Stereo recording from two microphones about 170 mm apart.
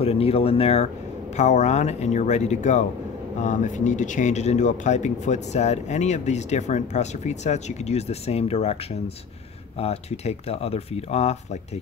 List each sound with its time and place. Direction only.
0.0 s speech: 35° left (ahead or behind)
9.8 s speech: 40° left (ahead or behind)